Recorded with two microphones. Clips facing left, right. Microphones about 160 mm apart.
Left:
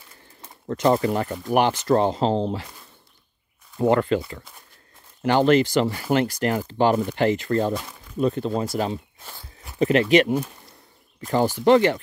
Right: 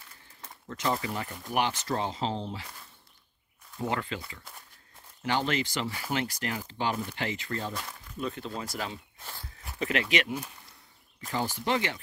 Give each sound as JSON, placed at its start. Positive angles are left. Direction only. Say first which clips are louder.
{"t": 0.7, "sound": "speech", "louder": "left 11 dB", "side_deg": 50}
{"t": 3.7, "sound": "speech", "louder": "left 13 dB", "side_deg": 55}
{"t": 5.2, "sound": "speech", "louder": "left 12 dB", "side_deg": 60}
{"t": 11.1, "sound": "speech", "louder": "left 10 dB", "side_deg": 55}
{"t": 11.4, "sound": "speech", "louder": "left 17 dB", "side_deg": 90}
{"t": 11.7, "sound": "speech", "louder": "left 13 dB", "side_deg": 55}